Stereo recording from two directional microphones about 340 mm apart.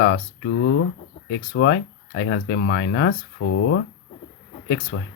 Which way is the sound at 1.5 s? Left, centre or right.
Left.